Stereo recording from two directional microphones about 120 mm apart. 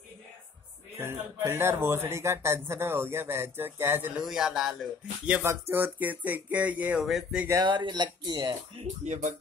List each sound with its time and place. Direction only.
0.9 s speech: 20° right (ahead or behind)
4.2 s speech: 5° right (ahead or behind)
5.4 s speech: 20° right (ahead or behind); by 7.4 s centre (ahead or behind)
7.6 s speech: 40° right (ahead or behind)
8.7 s speech: 75° right (ahead or behind)